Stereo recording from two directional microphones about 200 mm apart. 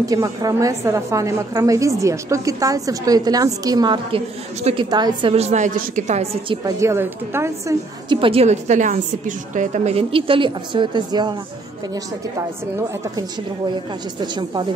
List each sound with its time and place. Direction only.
0.0 s a woman's voice: 15° right (ahead or behind); by 6.6 s 35° right (ahead or behind)
6.6 s a woman's voice: 15° right (ahead or behind)
8.2 s a woman's voice: 30° right (ahead or behind)
14.2 s a woman's voice: 20° right (ahead or behind)